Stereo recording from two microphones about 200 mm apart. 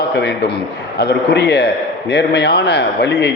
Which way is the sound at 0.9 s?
55° left (ahead or behind).